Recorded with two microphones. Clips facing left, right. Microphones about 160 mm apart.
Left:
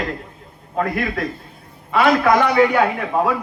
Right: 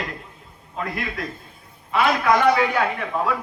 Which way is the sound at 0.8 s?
55° left (ahead or behind).